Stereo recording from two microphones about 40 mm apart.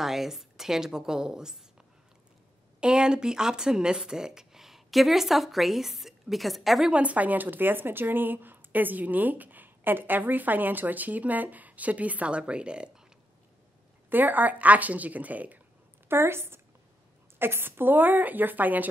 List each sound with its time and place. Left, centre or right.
0.0 s a woman's voice: centre
6.9 s a woman's voice: right
14.0 s a woman's voice: right
16.1 s a woman's voice: right
17.4 s a woman's voice: right